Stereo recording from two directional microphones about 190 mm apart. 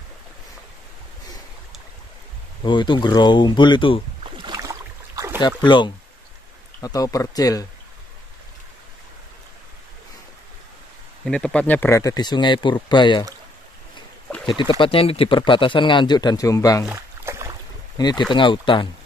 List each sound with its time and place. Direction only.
2.6 s speech: 25° left (ahead or behind)
4.2 s boat: 20° right (ahead or behind)
5.6 s speech: 25° left (ahead or behind)
11.2 s speech: 5° left (ahead or behind); by 13.2 s 25° left (ahead or behind)
14.4 s speech: 25° left (ahead or behind)
16.9 s boat: 15° right (ahead or behind)
17.9 s speech: 20° left (ahead or behind)